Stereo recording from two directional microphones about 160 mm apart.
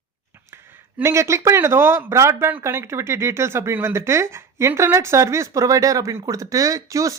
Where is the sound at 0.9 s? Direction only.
15° right (ahead or behind).